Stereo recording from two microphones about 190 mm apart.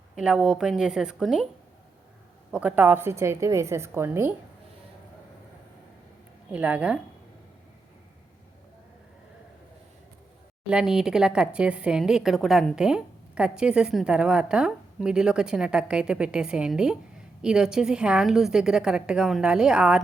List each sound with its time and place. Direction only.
0.2 s a woman's voice: 5° right (ahead or behind)
2.5 s a woman's voice: 5° right (ahead or behind)
6.5 s a woman's voice: 5° right (ahead or behind)
10.7 s a woman's voice: 5° right (ahead or behind)